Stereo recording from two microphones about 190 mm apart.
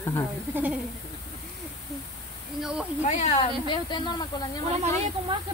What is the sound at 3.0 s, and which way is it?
Speech, 40° left (ahead or behind).